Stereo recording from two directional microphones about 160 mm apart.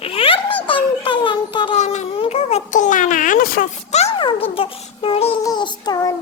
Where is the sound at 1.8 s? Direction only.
40° left (ahead or behind); by 3.7 s 65° left (ahead or behind).